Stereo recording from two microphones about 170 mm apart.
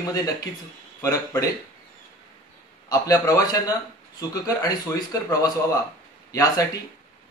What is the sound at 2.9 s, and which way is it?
A man's voice, 20° left (ahead or behind).